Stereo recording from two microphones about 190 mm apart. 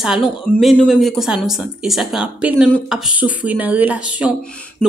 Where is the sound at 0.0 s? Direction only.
Centre (ahead or behind).